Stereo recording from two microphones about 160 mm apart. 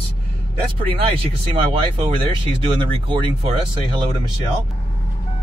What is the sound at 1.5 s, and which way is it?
Speech, 30° right (ahead or behind).